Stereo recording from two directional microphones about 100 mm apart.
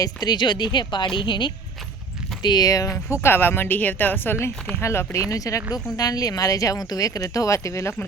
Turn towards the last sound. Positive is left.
turn(degrees=30)  # may be behind; listen again after turning